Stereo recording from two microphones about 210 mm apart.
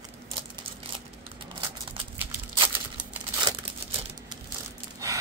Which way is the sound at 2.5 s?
20° right (ahead or behind).